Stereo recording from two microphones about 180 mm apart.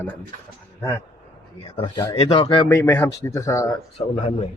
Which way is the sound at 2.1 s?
35° left (ahead or behind).